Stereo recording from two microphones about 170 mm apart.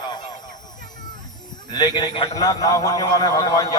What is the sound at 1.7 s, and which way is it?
Speech, 25° left (ahead or behind).